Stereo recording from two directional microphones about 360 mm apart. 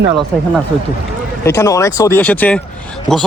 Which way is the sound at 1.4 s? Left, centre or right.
Centre.